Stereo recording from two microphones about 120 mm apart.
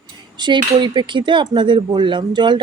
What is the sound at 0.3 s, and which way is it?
Speech, 40° right (ahead or behind).